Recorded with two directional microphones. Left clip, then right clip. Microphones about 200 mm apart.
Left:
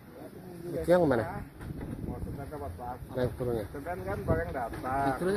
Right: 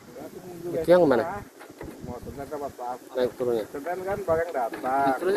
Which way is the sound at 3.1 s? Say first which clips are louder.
Right 7 dB; 5° right (ahead or behind).